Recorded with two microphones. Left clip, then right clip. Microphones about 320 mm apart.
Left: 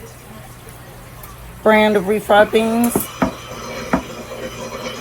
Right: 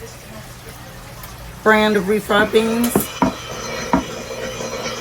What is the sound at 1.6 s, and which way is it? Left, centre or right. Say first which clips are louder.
Speech: left 1 dB; left.